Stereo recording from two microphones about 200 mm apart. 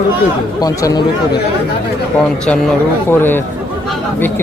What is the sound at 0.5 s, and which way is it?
Speech, 20° left (ahead or behind).